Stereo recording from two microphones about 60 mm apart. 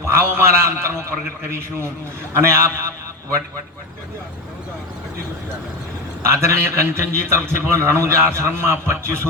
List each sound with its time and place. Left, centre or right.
0.0 s a man's voice: right
2.5 s a man's voice: right
6.2 s a man's voice: right